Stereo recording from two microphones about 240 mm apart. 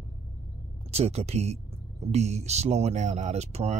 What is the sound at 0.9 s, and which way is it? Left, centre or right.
Speech, right.